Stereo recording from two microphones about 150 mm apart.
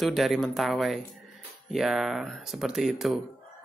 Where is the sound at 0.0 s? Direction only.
Centre (ahead or behind).